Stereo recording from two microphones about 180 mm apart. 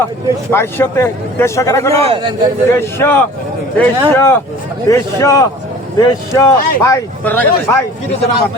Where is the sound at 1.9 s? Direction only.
30° right (ahead or behind).